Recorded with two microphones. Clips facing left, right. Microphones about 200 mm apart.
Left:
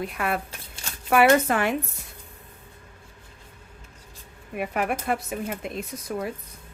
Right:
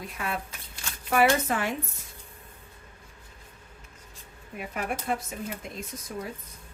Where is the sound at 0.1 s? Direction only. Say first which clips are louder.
Left 6 dB; 65° left (ahead or behind).